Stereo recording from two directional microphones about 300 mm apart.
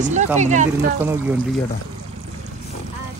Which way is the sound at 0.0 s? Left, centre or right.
Right.